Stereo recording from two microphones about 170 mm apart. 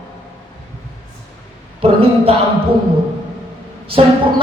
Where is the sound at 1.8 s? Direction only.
35° right (ahead or behind).